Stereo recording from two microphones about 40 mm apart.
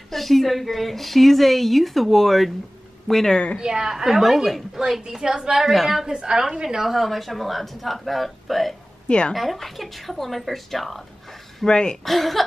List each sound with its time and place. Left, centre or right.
0.1 s a woman's voice: centre
3.5 s a woman's voice: centre
5.6 s a woman's voice: centre
6.9 s a woman's voice: centre
9.0 s a woman's voice: left
9.3 s a woman's voice: centre
11.6 s speech: centre
12.0 s a woman's voice: centre